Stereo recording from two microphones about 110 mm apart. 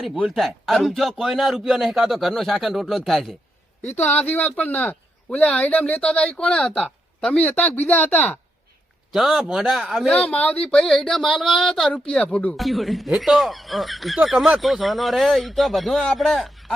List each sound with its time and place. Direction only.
0.0 s speech: centre (ahead or behind)
3.9 s speech: 15° left (ahead or behind)
9.1 s speech: 5° right (ahead or behind)
10.1 s speech: 10° left (ahead or behind)